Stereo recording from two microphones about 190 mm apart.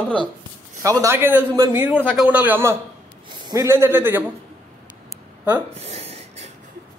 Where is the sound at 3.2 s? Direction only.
25° right (ahead or behind).